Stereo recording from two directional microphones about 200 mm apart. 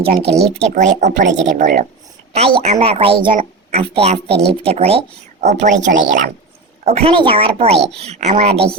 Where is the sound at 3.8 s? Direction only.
30° right (ahead or behind).